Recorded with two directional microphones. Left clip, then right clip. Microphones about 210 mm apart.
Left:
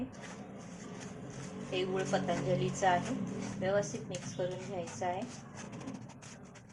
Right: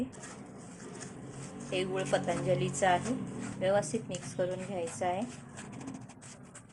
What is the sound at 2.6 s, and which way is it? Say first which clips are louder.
A woman's voice: right 2 dB; 50° right (ahead or behind).